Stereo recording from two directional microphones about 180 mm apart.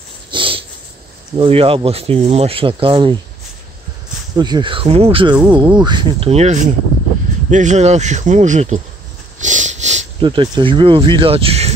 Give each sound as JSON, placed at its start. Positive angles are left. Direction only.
{"t": 0.3, "sound": "dog", "side_deg": -30}
{"t": 1.4, "sound": "speech", "side_deg": -30}
{"t": 4.4, "sound": "speech", "side_deg": -25}
{"t": 9.4, "sound": "a sound", "side_deg": -45}
{"t": 10.2, "sound": "speech", "side_deg": -25}